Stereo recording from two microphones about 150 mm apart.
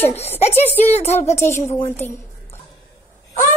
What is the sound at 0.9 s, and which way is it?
Speech, 45° left (ahead or behind).